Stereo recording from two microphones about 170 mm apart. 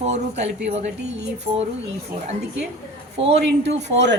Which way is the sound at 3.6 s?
90° right.